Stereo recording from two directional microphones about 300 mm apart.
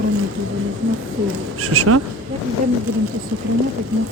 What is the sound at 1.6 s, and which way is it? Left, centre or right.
Speech, right.